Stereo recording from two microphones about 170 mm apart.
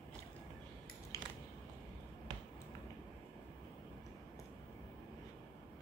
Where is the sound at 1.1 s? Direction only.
20° left (ahead or behind).